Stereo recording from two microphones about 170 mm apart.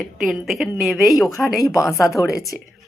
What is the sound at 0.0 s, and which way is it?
A woman's voice, centre (ahead or behind).